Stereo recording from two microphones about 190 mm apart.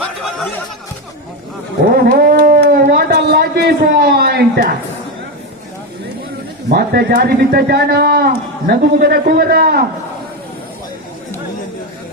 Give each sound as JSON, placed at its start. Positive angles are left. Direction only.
{"t": 1.8, "sound": "dog", "side_deg": -55}
{"t": 6.7, "sound": "speech", "side_deg": -55}